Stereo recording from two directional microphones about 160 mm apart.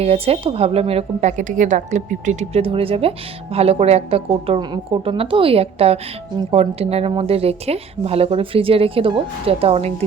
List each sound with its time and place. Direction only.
0.0 s a woman's voice: 40° right (ahead or behind)